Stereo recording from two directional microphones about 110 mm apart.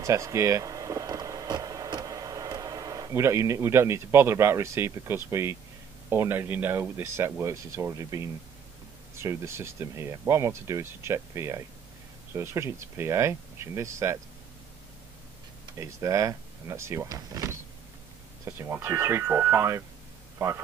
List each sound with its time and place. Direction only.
0.0 s vehicle: 30° right (ahead or behind)
6.0 s speech: 20° right (ahead or behind)
15.8 s speech: 30° right (ahead or behind)